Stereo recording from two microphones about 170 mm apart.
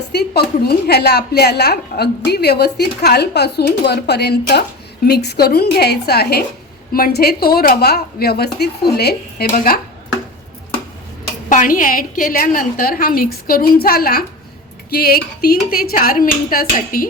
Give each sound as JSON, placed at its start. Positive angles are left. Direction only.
{"t": 0.1, "sound": "a woman's voice", "side_deg": 70}
{"t": 9.5, "sound": "a woman's voice", "side_deg": 60}
{"t": 11.4, "sound": "a woman's voice", "side_deg": 55}